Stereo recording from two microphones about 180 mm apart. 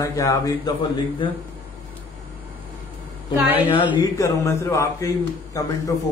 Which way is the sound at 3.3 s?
10° right (ahead or behind).